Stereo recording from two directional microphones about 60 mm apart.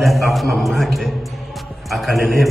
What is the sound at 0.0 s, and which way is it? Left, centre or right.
A man's voice, centre.